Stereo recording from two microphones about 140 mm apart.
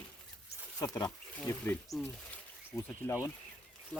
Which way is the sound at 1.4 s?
15° left (ahead or behind).